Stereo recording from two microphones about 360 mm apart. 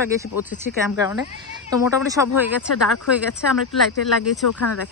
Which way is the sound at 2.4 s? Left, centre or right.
Left.